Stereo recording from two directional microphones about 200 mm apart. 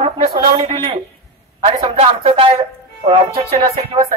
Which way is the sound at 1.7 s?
30° right (ahead or behind).